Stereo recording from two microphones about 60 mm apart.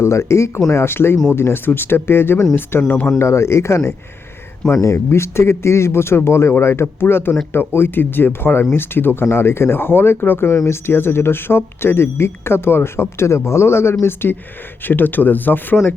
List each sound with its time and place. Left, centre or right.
0.0 s speech: left
3.2 s speech: left